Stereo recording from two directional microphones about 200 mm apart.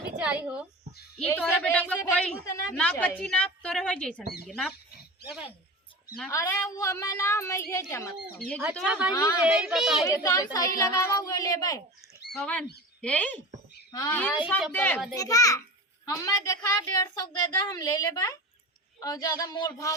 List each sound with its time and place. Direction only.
0.2 s speech: 5° right (ahead or behind)
1.2 s a woman's voice: 10° left (ahead or behind)
6.3 s a woman's voice: 15° left (ahead or behind)
8.7 s a woman's voice: centre (ahead or behind)
9.1 s a woman's voice: 15° left (ahead or behind)
9.4 s a woman's voice: 5° right (ahead or behind)
10.1 s a woman's voice: 15° left (ahead or behind)
12.4 s a woman's voice: 5° left (ahead or behind)